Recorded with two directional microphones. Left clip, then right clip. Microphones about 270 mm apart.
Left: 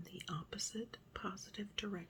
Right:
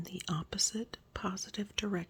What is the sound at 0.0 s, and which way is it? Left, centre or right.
Speech, right.